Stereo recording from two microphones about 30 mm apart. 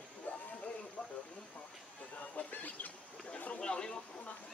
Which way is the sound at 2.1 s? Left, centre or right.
Left.